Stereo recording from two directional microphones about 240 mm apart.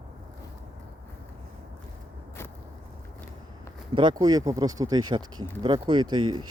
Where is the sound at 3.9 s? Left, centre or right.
Centre.